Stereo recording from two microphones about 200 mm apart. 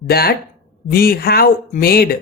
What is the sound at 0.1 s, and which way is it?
Speech, 50° left (ahead or behind).